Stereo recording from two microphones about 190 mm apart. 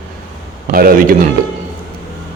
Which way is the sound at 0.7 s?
50° right (ahead or behind).